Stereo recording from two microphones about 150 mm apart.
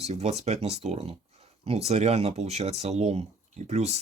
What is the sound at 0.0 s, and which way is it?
Speech, 45° right (ahead or behind).